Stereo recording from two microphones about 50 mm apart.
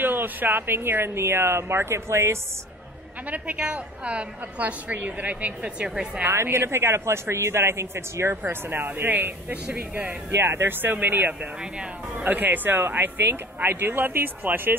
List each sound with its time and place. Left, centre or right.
0.0 s speech: right
3.5 s a woman's voice: right
6.2 s speech: right
8.4 s speech: right